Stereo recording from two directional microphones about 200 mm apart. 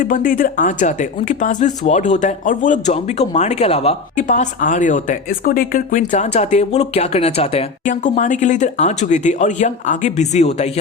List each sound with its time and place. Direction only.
0.0 s speech: 40° left (ahead or behind)